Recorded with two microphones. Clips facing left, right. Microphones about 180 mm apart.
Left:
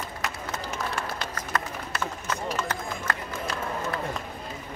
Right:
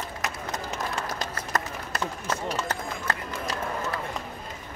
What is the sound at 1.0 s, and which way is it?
Run, 40° right (ahead or behind).